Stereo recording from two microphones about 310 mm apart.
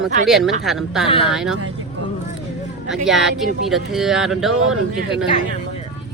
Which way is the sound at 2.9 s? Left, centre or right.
Centre.